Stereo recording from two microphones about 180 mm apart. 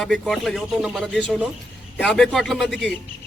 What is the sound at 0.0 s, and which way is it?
A man's voice, centre (ahead or behind).